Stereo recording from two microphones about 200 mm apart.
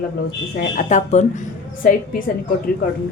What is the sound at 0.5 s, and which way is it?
A woman's voice, 40° left (ahead or behind).